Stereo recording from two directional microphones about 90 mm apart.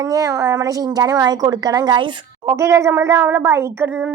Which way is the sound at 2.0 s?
60° right (ahead or behind).